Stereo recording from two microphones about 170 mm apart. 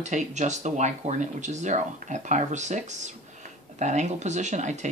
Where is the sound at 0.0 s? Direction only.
45° right (ahead or behind).